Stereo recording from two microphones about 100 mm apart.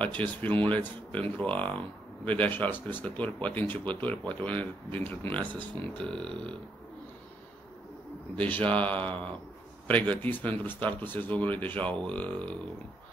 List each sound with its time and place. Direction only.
0.0 s speech: 15° left (ahead or behind)
8.4 s speech: 15° left (ahead or behind)